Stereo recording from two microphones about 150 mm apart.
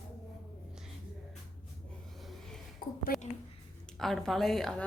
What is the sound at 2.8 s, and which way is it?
Speech, 75° left (ahead or behind).